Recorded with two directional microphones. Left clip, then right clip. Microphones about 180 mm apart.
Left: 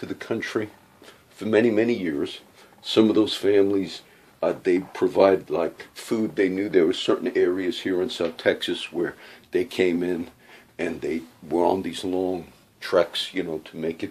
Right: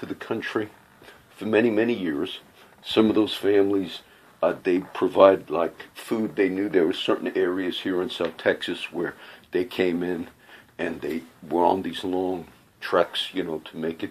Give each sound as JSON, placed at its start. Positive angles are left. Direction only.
{"t": 0.0, "sound": "speech", "side_deg": 15}